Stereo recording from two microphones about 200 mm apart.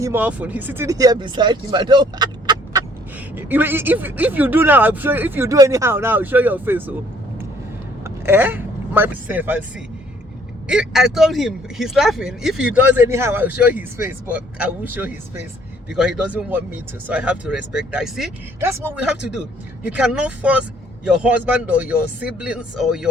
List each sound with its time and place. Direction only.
0.0 s speech: 10° right (ahead or behind)
3.3 s speech: 10° right (ahead or behind)
8.0 s speech: 10° right (ahead or behind)
10.7 s speech: centre (ahead or behind)
19.9 s speech: 5° right (ahead or behind)